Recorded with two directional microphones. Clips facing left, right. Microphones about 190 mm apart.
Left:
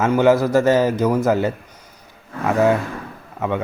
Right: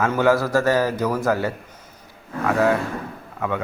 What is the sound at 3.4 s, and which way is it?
Speech, 20° left (ahead or behind).